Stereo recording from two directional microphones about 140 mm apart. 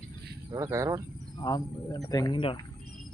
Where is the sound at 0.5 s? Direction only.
20° right (ahead or behind).